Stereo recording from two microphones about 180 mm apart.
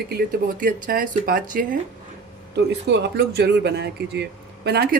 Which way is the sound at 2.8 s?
70° right (ahead or behind).